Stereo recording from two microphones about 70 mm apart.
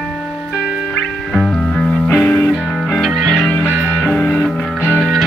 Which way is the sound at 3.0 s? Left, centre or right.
Centre.